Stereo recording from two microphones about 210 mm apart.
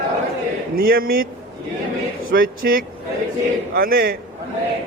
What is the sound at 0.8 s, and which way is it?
Speech, 45° right (ahead or behind).